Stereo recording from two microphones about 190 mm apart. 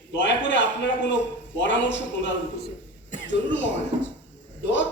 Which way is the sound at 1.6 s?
70° left (ahead or behind).